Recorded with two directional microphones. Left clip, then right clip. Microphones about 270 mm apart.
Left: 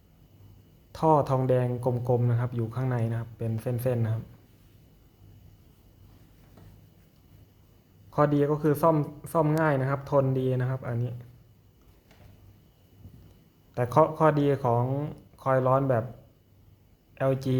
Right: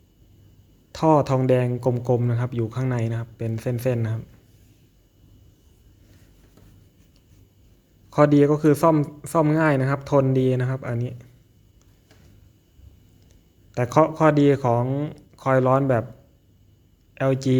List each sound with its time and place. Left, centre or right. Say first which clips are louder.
0.9 s speech: right 4 dB; centre
8.1 s speech: right 7 dB; centre
13.7 s speech: right 4 dB; centre
17.2 s speech: right 5 dB; centre